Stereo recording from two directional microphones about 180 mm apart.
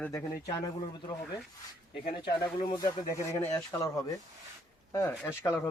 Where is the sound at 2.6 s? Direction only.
20° left (ahead or behind).